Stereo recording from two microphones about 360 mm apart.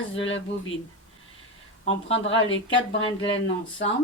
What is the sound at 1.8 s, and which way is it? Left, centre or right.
Speech, left.